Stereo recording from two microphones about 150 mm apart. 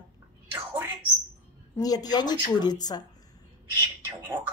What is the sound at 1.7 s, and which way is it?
A woman's voice, 25° left (ahead or behind).